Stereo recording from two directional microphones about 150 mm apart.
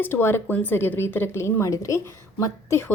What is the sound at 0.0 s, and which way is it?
A woman's voice, 15° left (ahead or behind).